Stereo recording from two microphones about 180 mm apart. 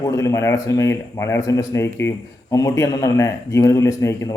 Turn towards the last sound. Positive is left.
turn(degrees=15)  # may be behind; listen again after turning